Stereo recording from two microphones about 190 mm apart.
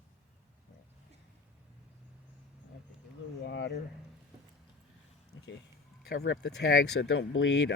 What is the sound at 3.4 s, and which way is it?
Speech, 70° left (ahead or behind).